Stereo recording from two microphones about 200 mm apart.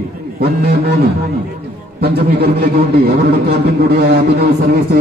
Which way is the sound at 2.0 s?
50° right (ahead or behind).